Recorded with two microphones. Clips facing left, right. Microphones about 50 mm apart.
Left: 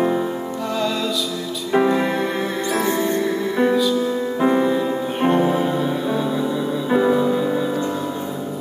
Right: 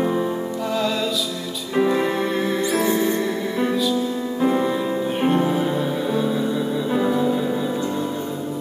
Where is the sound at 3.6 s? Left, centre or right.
Centre.